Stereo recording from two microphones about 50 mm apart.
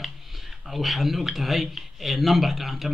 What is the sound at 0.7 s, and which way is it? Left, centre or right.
Speech, centre.